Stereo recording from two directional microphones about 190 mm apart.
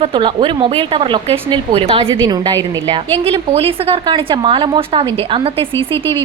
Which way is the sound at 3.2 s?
30° right (ahead or behind).